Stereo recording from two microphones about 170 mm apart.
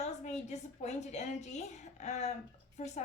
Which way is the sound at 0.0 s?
40° left (ahead or behind).